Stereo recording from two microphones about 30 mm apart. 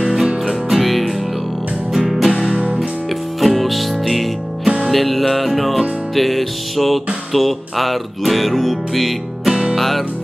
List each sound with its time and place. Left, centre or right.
0.0 s music: centre
3.3 s music: centre
4.9 s music: centre
9.5 s music: right
9.8 s music: centre